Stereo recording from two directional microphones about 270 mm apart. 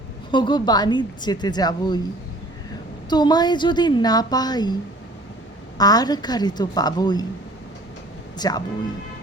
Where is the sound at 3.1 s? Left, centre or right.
Centre.